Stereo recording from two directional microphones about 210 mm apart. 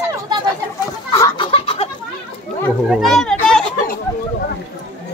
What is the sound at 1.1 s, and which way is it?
Chicken, 15° left (ahead or behind).